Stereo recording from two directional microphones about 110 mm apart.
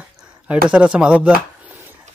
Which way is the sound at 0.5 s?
10° right (ahead or behind).